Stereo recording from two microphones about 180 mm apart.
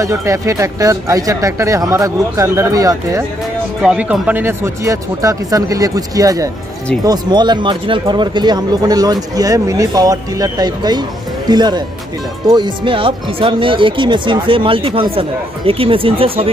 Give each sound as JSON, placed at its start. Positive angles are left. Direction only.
{"t": 0.0, "sound": "speech", "side_deg": -15}
{"t": 3.8, "sound": "speech", "side_deg": -5}